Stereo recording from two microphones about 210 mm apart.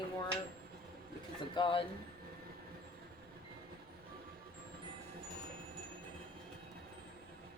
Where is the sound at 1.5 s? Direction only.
25° left (ahead or behind).